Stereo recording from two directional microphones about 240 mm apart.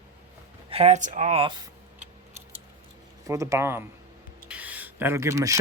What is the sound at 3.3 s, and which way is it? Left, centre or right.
Speech, centre.